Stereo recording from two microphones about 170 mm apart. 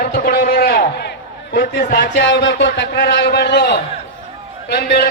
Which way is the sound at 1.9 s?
85° left.